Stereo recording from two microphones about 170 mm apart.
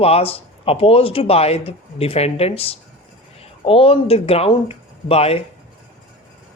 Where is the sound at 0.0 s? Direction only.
35° left (ahead or behind).